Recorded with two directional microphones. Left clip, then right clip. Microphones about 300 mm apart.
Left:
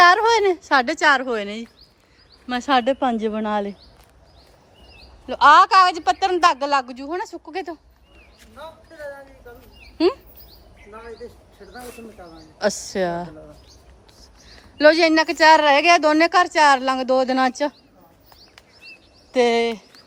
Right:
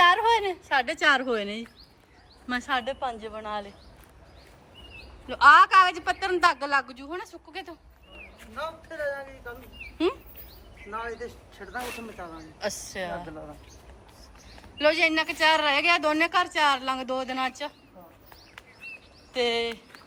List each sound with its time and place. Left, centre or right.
0.0 s a sound: centre
0.7 s a woman's voice: centre
5.3 s a woman's voice: centre
12.5 s a woman's voice: centre
14.8 s a woman's voice: centre
19.3 s speech: centre